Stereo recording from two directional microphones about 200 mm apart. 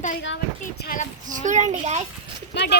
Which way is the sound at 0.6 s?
40° left (ahead or behind).